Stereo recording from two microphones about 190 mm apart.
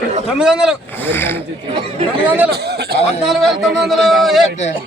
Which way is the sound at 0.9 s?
10° left (ahead or behind).